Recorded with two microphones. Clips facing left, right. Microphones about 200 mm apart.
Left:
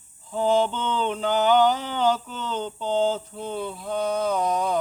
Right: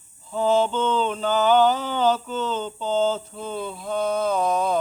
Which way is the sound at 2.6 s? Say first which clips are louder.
Left 2 dB; 15° left (ahead or behind).